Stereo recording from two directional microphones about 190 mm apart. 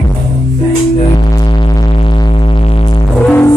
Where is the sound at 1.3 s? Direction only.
20° left (ahead or behind).